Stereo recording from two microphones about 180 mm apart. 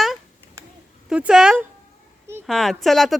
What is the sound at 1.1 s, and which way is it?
Speech, 5° right (ahead or behind).